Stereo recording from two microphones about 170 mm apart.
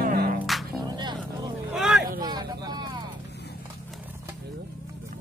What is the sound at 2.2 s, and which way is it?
Vehicle, 25° right (ahead or behind).